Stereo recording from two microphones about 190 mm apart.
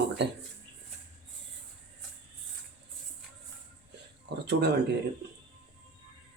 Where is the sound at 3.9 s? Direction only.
60° right (ahead or behind).